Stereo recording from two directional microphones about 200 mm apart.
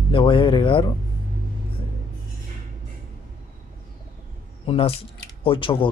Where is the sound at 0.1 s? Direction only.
25° left (ahead or behind).